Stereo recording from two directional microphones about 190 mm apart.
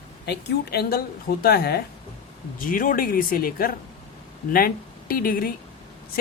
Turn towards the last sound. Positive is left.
turn(degrees=50)  # may be behind; listen again after turning